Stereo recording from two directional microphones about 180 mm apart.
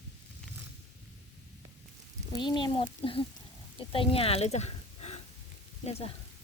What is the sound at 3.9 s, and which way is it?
A woman's voice, 30° left (ahead or behind).